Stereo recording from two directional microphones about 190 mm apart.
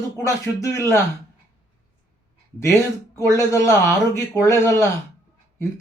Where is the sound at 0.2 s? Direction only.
15° left (ahead or behind).